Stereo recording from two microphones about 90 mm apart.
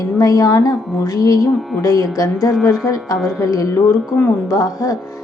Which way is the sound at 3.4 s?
40° left (ahead or behind).